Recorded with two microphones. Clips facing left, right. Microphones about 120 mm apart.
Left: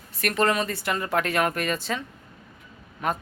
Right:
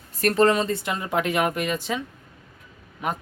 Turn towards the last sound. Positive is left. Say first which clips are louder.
# left 1 dB
turn(degrees=-15)  # may be behind; listen again after turning